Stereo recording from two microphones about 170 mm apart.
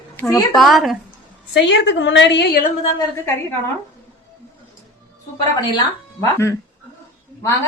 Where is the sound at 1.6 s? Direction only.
90° left.